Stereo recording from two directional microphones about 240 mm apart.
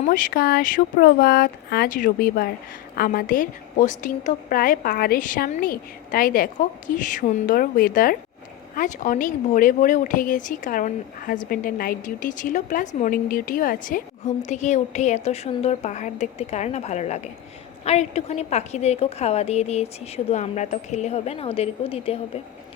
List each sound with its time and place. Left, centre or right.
0.0 s a woman's voice: left